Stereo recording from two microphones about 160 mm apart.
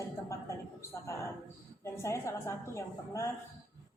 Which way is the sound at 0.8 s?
20° left (ahead or behind).